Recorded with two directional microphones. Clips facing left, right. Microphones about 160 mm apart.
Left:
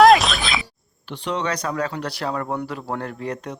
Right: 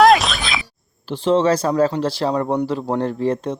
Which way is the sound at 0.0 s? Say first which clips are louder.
Even; centre (ahead or behind).